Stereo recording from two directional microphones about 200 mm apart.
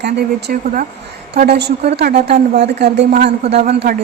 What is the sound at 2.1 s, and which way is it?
Speech, 30° right (ahead or behind).